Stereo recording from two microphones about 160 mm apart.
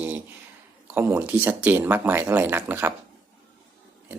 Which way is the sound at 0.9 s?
10° right (ahead or behind).